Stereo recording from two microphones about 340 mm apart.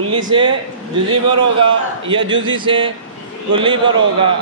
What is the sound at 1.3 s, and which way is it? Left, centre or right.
Speech, centre.